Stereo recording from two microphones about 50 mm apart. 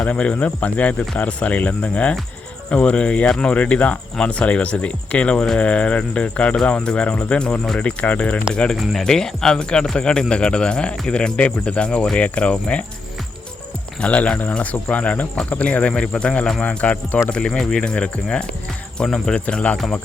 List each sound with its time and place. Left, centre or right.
0.0 s speech: left
8.7 s speech: centre; by 12.8 s left
14.0 s speech: left
19.7 s speech: centre